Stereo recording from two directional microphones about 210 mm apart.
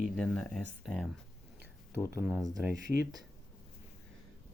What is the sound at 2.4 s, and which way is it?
Speech, centre (ahead or behind).